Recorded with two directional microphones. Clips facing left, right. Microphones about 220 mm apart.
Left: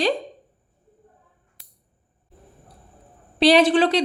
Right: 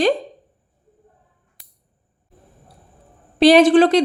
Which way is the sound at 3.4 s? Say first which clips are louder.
Right 5 dB; 45° right (ahead or behind).